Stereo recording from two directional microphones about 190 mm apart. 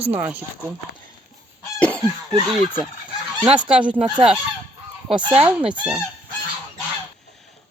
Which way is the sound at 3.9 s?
25° right (ahead or behind).